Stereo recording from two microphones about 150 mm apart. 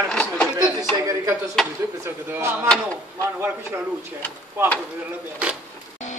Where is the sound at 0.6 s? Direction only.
25° right (ahead or behind).